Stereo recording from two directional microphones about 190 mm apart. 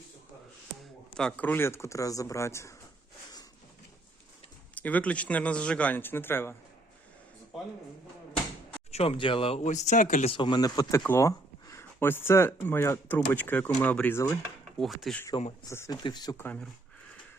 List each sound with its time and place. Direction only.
1.1 s speech: 5° left (ahead or behind)
4.7 s speech: 10° left (ahead or behind)
8.9 s speech: 30° left (ahead or behind)
10.3 s speech: 25° left (ahead or behind); by 15.2 s centre (ahead or behind)
15.7 s speech: 15° left (ahead or behind)
16.4 s speech: 10° left (ahead or behind)